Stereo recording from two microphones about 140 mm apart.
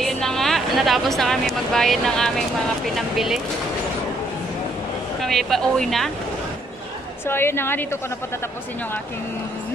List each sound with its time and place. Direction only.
0.0 s a woman's voice: 5° left (ahead or behind)
5.2 s speech: centre (ahead or behind)
7.2 s a woman's voice: 15° left (ahead or behind)